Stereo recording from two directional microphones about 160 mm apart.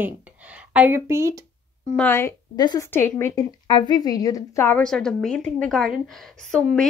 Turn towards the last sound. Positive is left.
turn(degrees=5)  # may be behind; listen again after turning